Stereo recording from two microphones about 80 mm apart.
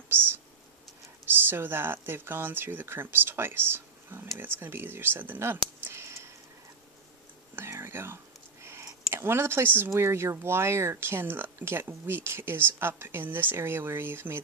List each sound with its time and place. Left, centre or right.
1.5 s speech: right
7.5 s whispering: right
8.6 s a sound: right
9.1 s speech: right